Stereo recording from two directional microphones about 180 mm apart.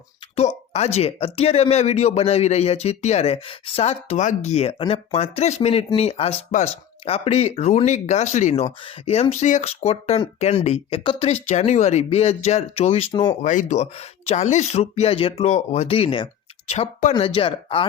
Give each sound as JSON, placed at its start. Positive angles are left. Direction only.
{"t": 0.3, "sound": "speech", "side_deg": 35}
{"t": 8.6, "sound": "speech", "side_deg": 30}
{"t": 13.4, "sound": "speech", "side_deg": 45}